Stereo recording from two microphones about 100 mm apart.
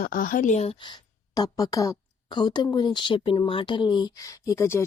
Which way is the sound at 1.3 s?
40° left (ahead or behind).